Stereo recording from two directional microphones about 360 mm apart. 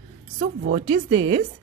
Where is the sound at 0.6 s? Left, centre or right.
Centre.